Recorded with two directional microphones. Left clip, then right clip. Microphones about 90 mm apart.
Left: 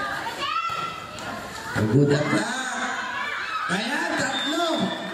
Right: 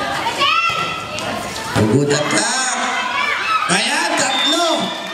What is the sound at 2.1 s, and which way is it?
Speech, 30° right (ahead or behind).